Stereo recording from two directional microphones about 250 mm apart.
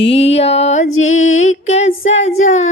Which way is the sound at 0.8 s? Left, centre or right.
Left.